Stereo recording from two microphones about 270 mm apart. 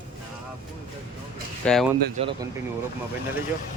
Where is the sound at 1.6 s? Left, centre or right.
Centre.